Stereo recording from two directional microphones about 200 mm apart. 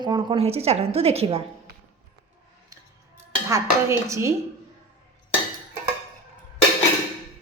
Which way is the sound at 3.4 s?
15° right (ahead or behind).